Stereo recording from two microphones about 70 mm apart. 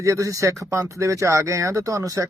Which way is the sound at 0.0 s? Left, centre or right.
Right.